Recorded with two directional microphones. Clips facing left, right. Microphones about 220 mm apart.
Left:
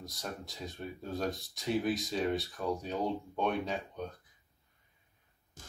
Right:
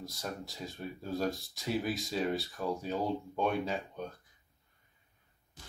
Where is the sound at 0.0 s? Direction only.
Centre (ahead or behind).